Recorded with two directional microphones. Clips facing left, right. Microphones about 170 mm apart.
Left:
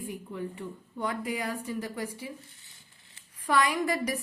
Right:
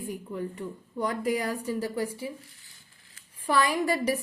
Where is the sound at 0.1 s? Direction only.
40° right (ahead or behind).